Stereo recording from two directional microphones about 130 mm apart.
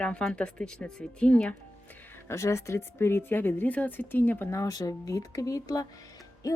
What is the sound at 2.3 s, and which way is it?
Speech, 20° left (ahead or behind).